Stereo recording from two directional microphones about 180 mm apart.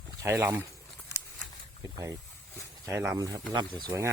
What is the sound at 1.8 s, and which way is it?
Speech, 20° right (ahead or behind).